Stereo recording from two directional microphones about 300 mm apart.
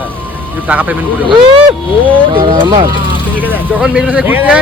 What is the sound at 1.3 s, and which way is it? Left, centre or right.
Speech, centre.